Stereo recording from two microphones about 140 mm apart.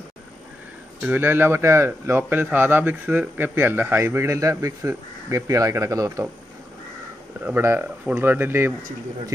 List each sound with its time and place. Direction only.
1.0 s speech: 15° right (ahead or behind)
7.4 s speech: 15° right (ahead or behind)